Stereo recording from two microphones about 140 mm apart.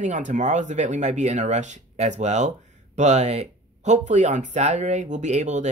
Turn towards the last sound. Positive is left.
turn(degrees=-55)  # may be behind; listen again after turning